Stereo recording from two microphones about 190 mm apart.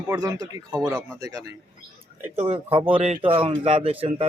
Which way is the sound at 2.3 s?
35° right (ahead or behind).